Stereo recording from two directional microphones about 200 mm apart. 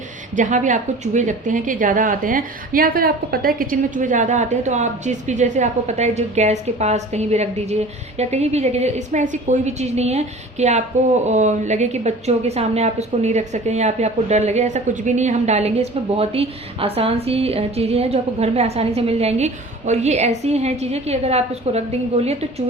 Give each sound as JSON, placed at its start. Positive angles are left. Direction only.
{"t": 0.3, "sound": "a woman's voice", "side_deg": -40}